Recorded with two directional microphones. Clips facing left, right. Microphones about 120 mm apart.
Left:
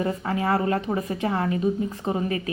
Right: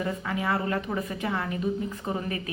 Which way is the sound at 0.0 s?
35° left (ahead or behind).